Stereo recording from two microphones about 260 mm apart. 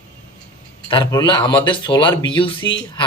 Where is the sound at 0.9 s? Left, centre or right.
Centre.